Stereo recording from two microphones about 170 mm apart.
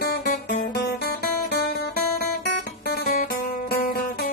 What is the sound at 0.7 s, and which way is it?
Music, 70° left (ahead or behind).